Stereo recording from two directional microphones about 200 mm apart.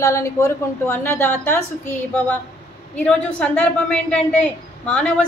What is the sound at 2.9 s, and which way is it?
A woman's voice, 5° left (ahead or behind).